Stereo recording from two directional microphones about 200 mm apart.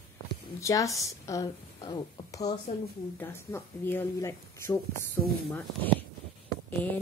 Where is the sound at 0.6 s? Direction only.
15° left (ahead or behind).